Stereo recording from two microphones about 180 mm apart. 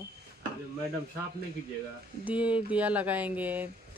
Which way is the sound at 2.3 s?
5° right (ahead or behind).